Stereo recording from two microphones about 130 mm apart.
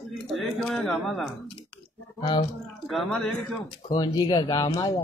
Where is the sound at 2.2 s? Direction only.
40° left (ahead or behind).